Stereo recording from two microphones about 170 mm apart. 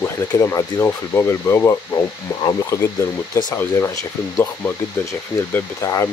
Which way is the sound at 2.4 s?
25° left (ahead or behind).